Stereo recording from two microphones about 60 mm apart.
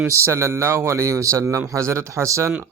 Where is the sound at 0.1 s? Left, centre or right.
Right.